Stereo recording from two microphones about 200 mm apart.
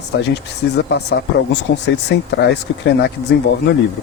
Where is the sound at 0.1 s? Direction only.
60° left (ahead or behind).